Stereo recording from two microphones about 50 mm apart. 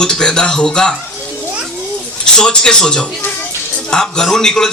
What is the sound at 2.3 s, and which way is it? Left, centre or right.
Speech, centre.